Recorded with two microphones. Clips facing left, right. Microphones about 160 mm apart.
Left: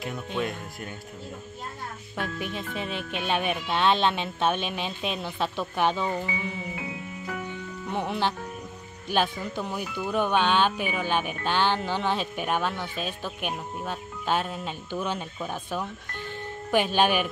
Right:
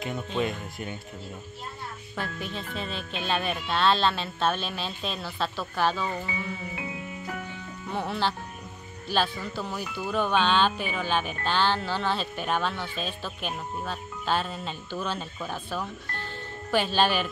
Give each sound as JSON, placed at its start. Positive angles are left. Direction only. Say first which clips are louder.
{"t": 0.4, "sound": "speech", "louder": "right 2 dB", "side_deg": 0}
{"t": 2.1, "sound": "speech", "louder": "left 2 dB", "side_deg": 15}
{"t": 7.9, "sound": "speech", "louder": "left 1 dB", "side_deg": 15}